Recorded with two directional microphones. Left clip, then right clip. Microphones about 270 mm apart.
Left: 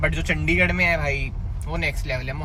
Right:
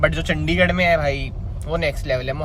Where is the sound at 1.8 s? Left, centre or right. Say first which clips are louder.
Right 4 dB; centre.